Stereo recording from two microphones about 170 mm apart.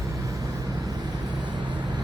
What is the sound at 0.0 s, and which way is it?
Vehicle, 20° right (ahead or behind).